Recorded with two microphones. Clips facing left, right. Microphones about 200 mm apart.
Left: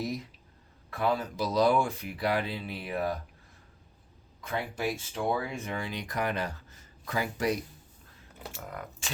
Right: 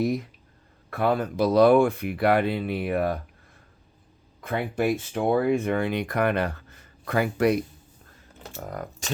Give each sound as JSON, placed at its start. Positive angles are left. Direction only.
{"t": 0.0, "sound": "speech", "side_deg": -55}
{"t": 4.4, "sound": "speech", "side_deg": -55}
{"t": 8.6, "sound": "speech", "side_deg": -40}